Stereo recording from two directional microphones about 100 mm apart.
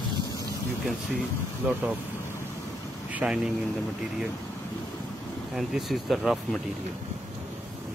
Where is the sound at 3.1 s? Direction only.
10° right (ahead or behind).